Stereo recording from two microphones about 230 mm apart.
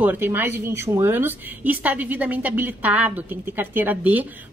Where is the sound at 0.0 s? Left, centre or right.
Centre.